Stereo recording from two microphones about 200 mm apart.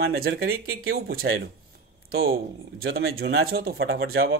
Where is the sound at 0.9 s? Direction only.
50° right (ahead or behind).